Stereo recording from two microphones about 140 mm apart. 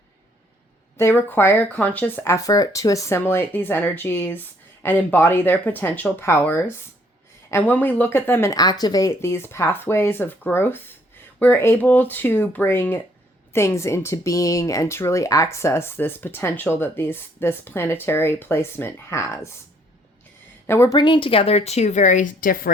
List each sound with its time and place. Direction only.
0.9 s speech: 15° left (ahead or behind)
20.7 s a woman's voice: 15° left (ahead or behind)
20.9 s speech: 35° left (ahead or behind); by 22.7 s 85° left